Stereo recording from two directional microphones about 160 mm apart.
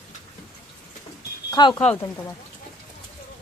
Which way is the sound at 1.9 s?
15° left (ahead or behind).